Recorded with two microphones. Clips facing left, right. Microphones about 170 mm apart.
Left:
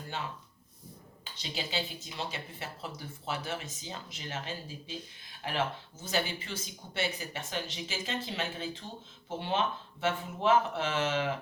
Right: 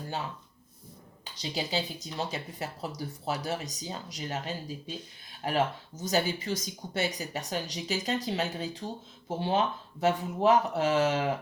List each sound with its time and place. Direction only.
1.2 s speech: 35° right (ahead or behind)